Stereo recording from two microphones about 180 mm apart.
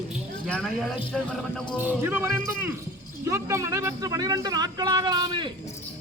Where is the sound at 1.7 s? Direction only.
10° right (ahead or behind).